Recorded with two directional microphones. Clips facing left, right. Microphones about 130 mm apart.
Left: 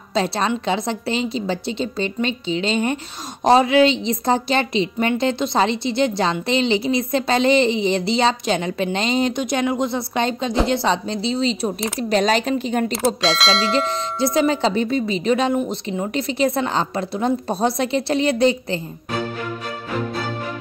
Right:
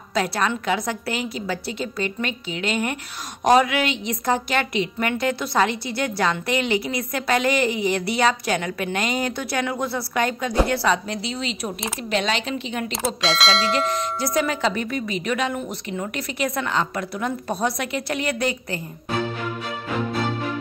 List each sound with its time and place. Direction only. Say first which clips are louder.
0.1 s a woman's voice: left 2 dB; 25° left (ahead or behind); by 12.9 s 45° left (ahead or behind)
12.9 s speech: left 4 dB; centre (ahead or behind)
13.7 s a woman's voice: left 2 dB; 30° left (ahead or behind)